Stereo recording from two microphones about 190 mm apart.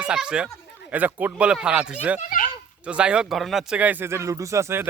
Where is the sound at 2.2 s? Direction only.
45° left (ahead or behind).